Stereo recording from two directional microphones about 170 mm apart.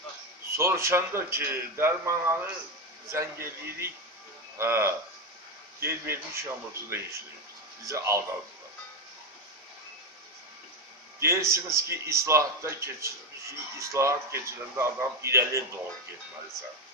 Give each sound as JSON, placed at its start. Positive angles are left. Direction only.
{"t": 0.5, "sound": "a man's voice", "side_deg": -15}
{"t": 11.1, "sound": "a man's voice", "side_deg": -15}